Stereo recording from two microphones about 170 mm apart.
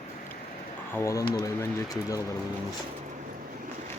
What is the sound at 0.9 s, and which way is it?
Speech, 15° left (ahead or behind).